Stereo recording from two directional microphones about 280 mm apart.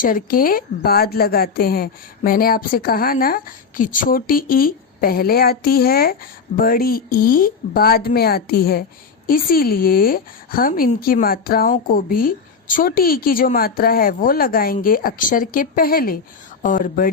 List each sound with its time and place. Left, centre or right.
0.0 s a woman's voice: left